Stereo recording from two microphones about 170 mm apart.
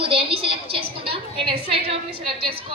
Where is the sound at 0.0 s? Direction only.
35° right (ahead or behind).